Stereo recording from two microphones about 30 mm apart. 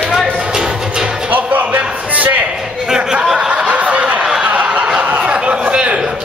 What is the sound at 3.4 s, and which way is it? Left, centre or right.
Snicker, right.